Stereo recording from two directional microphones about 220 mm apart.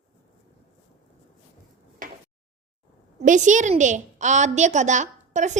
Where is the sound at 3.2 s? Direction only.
35° right (ahead or behind).